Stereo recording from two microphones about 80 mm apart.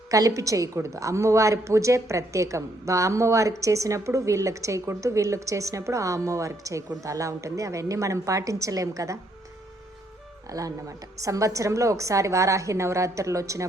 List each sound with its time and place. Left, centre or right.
0.1 s a woman's voice: right
10.5 s a woman's voice: right